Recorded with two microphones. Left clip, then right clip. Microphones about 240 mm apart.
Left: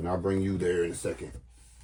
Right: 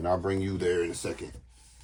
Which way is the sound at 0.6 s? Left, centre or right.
Centre.